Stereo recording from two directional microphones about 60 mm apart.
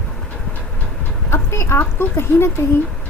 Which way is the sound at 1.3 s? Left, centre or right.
Left.